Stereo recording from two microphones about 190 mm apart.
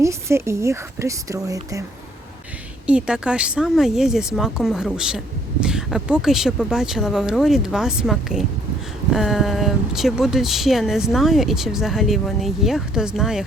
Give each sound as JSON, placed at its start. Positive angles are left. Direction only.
{"t": 0.0, "sound": "speech", "side_deg": -15}
{"t": 2.8, "sound": "speech", "side_deg": -5}